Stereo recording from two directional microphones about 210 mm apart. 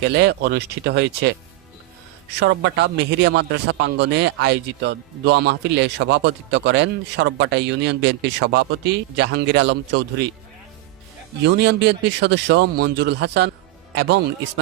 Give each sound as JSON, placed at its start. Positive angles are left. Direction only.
{"t": 0.0, "sound": "a man's voice", "side_deg": -55}
{"t": 2.4, "sound": "a man's voice", "side_deg": -55}
{"t": 11.4, "sound": "a man's voice", "side_deg": -55}